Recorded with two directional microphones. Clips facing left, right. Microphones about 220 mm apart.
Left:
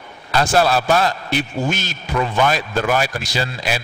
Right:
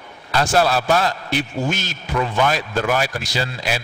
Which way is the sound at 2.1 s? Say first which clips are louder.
Left 1 dB; 25° left (ahead or behind).